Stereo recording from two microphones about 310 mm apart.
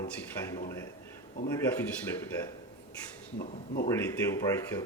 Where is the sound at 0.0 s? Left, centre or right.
Centre.